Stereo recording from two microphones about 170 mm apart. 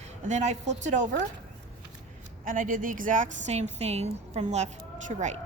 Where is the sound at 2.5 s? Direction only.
55° right (ahead or behind).